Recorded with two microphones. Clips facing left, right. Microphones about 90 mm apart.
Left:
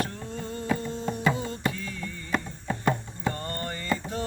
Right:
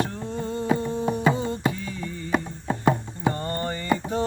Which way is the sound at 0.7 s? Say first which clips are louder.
Right 5 dB; 20° right (ahead or behind).